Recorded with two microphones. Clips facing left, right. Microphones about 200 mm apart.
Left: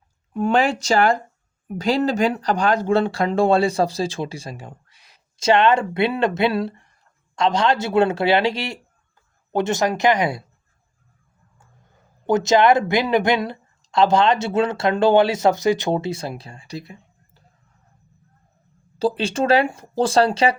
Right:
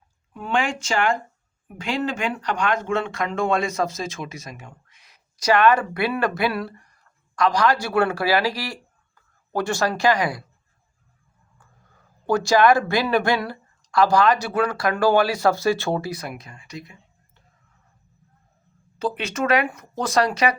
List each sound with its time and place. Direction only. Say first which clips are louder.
0.3 s speech: left 6 dB; 40° left (ahead or behind); by 10.4 s 25° left (ahead or behind)
12.2 s speech: left 2 dB; 20° left (ahead or behind)
18.9 s speech: left 5 dB; 30° left (ahead or behind)